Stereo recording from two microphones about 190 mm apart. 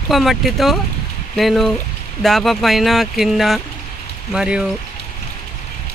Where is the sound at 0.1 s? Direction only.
Centre (ahead or behind).